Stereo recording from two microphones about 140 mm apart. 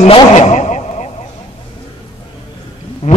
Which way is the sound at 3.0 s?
55° left (ahead or behind).